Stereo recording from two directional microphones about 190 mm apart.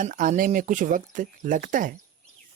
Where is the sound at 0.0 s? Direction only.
45° right (ahead or behind).